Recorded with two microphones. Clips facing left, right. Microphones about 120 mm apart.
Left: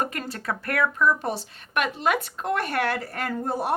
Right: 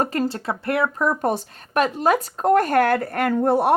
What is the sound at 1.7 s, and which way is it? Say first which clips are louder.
Speech: right 5 dB; 35° right (ahead or behind).